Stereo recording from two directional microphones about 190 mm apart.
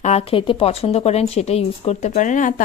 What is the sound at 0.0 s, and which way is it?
A woman's voice, 30° left (ahead or behind).